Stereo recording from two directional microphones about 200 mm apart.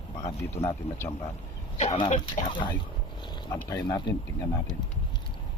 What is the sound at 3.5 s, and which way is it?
Speech, 20° left (ahead or behind).